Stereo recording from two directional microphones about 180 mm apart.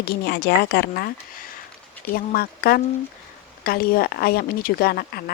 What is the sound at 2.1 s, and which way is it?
Speech, 55° left (ahead or behind).